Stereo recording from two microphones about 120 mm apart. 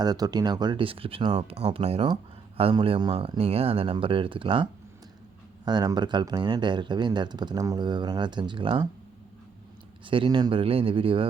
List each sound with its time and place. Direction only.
0.0 s speech: 35° right (ahead or behind)
10.1 s speech: 45° right (ahead or behind)